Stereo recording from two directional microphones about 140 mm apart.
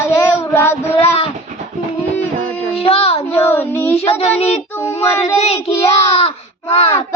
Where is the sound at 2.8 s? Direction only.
45° left (ahead or behind).